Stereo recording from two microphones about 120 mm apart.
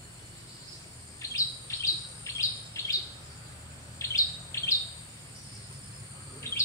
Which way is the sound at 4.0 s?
25° left (ahead or behind).